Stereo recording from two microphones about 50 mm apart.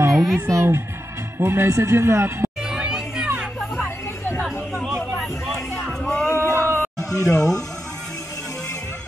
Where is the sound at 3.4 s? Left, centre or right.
Centre.